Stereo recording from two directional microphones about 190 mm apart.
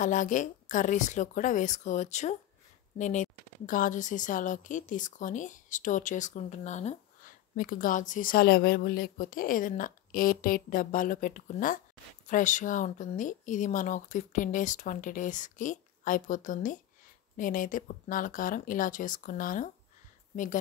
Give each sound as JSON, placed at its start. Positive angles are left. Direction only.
{"t": 0.0, "sound": "speech", "side_deg": 40}